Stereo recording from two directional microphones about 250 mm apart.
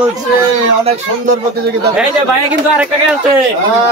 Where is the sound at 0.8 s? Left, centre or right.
Right.